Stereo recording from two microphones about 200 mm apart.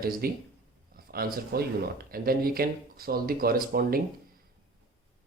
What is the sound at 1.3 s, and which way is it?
Speech, 50° right (ahead or behind).